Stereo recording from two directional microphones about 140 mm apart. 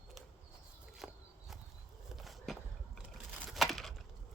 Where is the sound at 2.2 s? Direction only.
Centre (ahead or behind).